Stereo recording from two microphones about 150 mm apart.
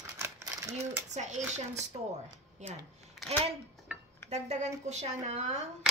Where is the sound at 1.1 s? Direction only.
50° right (ahead or behind).